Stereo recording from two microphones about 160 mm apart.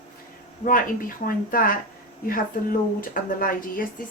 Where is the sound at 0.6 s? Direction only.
60° left (ahead or behind).